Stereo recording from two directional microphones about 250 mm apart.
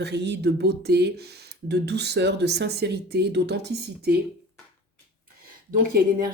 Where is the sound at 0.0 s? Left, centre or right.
Right.